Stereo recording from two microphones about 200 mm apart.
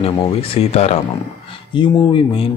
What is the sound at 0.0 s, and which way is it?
Speech, 30° left (ahead or behind).